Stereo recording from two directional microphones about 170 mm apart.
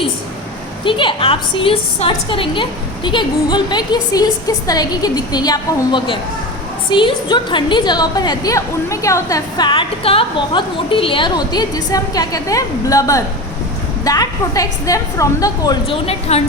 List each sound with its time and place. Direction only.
0.9 s a woman's voice: 30° left (ahead or behind)
16.3 s a woman's voice: 40° left (ahead or behind)